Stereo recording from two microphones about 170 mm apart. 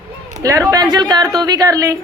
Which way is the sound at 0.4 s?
20° right (ahead or behind).